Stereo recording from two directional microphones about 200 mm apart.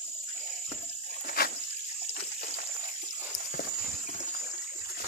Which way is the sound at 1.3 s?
50° left (ahead or behind).